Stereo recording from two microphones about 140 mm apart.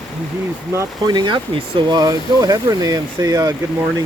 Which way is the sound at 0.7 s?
30° right (ahead or behind).